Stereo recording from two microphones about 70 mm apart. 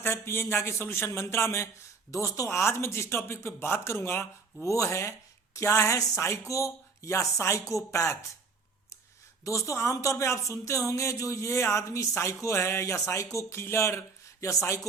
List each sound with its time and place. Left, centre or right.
0.0 s a woman's voice: left
4.6 s speech: left
9.4 s speech: left